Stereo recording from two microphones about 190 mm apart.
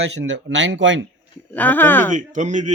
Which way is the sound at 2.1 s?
40° right (ahead or behind).